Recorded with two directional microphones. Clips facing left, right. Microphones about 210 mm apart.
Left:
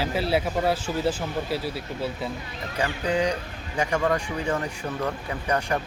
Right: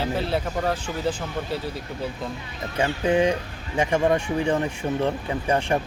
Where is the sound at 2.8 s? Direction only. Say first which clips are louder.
Right 4 dB; 25° right (ahead or behind).